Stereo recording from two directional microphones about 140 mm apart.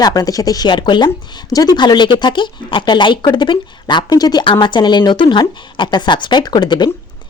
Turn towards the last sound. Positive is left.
turn(degrees=30)  # may be behind; listen again after turning